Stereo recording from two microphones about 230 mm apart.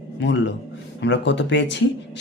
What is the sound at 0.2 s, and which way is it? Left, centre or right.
Speech, left.